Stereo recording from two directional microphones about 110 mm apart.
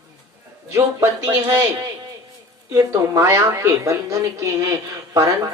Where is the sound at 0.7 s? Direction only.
30° right (ahead or behind).